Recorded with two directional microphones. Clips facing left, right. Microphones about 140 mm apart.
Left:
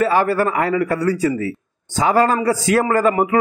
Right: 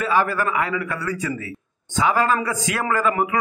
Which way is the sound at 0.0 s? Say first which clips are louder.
Left 5 dB; 40° left (ahead or behind).